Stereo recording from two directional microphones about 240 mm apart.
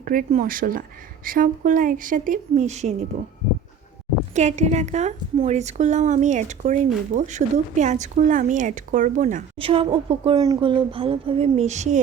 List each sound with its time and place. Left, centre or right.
0.0 s a woman's voice: right
4.4 s a woman's voice: right